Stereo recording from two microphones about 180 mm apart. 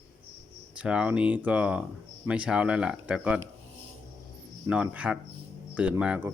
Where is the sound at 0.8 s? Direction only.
5° right (ahead or behind).